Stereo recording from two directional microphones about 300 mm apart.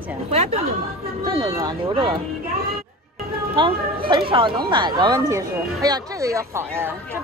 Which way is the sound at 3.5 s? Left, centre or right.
Centre.